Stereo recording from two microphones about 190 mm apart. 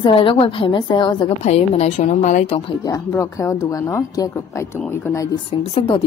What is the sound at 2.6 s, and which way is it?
Speech, 20° left (ahead or behind).